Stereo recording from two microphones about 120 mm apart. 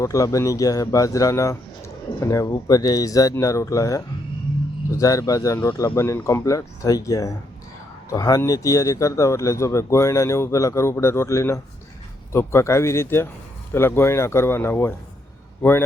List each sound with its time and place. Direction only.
0.0 s speech: 25° left (ahead or behind)